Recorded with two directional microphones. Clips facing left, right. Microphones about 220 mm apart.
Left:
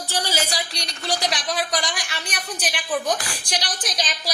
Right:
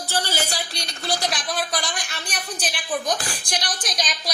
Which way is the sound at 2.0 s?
75° left (ahead or behind).